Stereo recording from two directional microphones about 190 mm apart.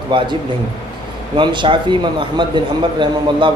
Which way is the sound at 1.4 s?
25° right (ahead or behind).